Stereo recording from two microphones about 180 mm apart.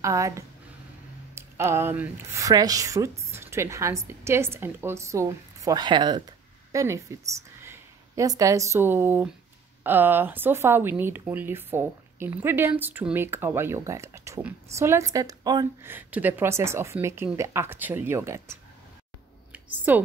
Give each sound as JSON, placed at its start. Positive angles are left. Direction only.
{"t": 0.0, "sound": "speech", "side_deg": -15}
{"t": 15.8, "sound": "speech", "side_deg": -10}
{"t": 19.5, "sound": "a sound", "side_deg": -10}